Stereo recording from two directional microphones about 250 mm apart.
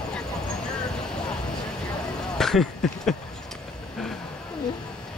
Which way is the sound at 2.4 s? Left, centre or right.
Centre.